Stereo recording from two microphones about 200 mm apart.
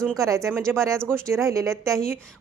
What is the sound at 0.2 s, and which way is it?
Speech, 15° right (ahead or behind).